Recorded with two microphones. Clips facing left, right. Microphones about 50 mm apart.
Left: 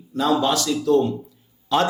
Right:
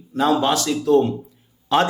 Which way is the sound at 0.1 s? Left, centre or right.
Right.